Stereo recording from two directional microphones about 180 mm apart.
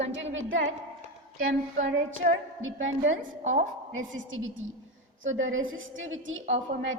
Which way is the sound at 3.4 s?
40° right (ahead or behind).